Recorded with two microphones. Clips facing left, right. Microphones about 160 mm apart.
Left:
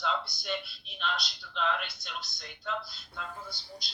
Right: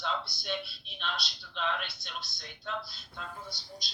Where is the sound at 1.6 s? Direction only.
5° left (ahead or behind).